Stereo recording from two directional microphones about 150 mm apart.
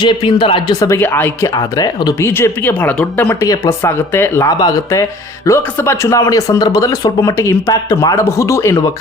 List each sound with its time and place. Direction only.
0.0 s speech: 30° left (ahead or behind); by 1.5 s 15° left (ahead or behind)
1.5 s speech: 25° left (ahead or behind)
3.4 s speech: 20° left (ahead or behind)